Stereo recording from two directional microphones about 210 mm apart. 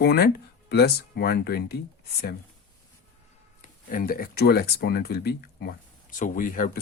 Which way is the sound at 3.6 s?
40° left (ahead or behind).